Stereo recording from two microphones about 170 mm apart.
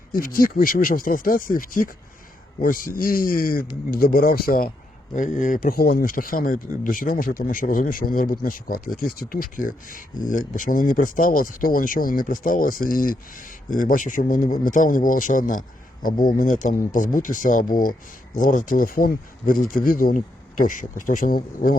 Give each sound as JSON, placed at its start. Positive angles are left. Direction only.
{"t": 0.1, "sound": "speech", "side_deg": 55}
{"t": 5.1, "sound": "speech", "side_deg": 50}